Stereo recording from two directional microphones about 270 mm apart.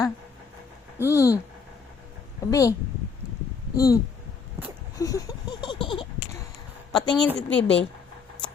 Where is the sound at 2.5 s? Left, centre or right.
Centre.